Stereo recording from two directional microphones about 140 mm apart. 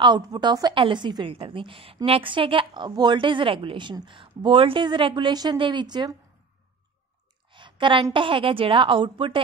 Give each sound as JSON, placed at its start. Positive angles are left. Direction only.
{"t": 0.0, "sound": "a woman's voice", "side_deg": -30}
{"t": 7.5, "sound": "a woman's voice", "side_deg": -35}